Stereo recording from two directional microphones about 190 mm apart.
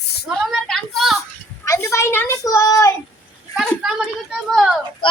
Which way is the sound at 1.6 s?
15° left (ahead or behind).